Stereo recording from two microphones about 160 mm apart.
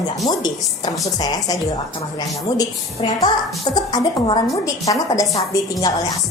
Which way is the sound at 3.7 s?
25° left (ahead or behind).